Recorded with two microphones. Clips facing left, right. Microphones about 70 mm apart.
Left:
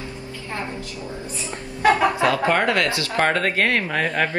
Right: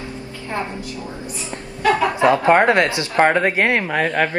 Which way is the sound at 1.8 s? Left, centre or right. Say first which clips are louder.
Even; left.